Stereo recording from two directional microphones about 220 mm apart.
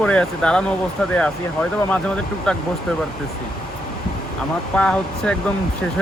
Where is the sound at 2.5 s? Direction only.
5° left (ahead or behind).